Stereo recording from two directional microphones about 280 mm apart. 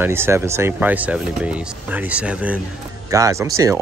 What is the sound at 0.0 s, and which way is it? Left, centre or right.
Speech, centre.